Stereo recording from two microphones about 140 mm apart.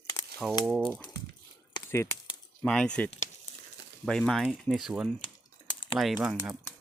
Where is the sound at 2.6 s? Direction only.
5° left (ahead or behind).